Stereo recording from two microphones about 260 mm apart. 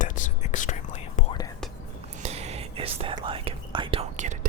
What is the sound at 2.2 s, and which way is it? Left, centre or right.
Whispering, right.